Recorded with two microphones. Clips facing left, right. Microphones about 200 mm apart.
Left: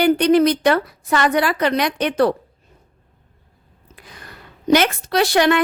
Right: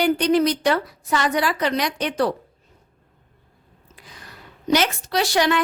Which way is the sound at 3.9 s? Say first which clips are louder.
Left 3 dB; 60° left (ahead or behind).